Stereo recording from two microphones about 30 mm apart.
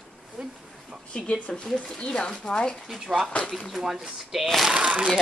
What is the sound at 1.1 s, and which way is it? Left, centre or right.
Speech, left.